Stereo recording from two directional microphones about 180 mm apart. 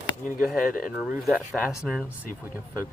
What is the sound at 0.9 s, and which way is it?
Speech, centre (ahead or behind).